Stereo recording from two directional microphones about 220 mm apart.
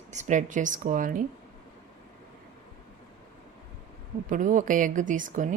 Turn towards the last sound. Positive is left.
turn(degrees=-35)  # may be behind; listen again after turning